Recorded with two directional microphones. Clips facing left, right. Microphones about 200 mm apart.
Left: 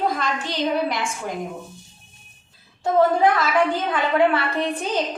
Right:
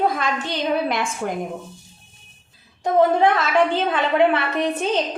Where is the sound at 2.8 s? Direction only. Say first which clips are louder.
Right 1 dB; 20° right (ahead or behind).